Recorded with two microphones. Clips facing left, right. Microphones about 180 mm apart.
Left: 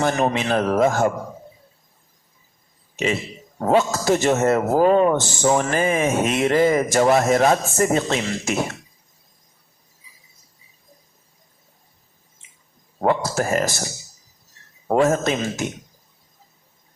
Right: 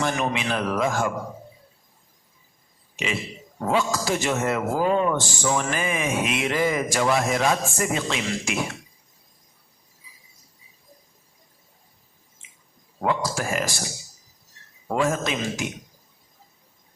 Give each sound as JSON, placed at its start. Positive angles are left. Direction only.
{"t": 0.0, "sound": "speech", "side_deg": 40}
{"t": 3.6, "sound": "speech", "side_deg": 40}
{"t": 13.0, "sound": "speech", "side_deg": 40}
{"t": 14.8, "sound": "speech", "side_deg": 40}